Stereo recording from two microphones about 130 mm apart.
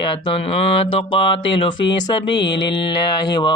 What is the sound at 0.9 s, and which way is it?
Mantra, 40° left (ahead or behind).